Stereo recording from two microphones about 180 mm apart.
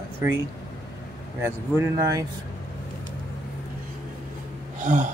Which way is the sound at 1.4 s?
15° right (ahead or behind).